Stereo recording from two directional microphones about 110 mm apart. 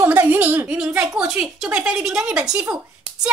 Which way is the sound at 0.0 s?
20° right (ahead or behind).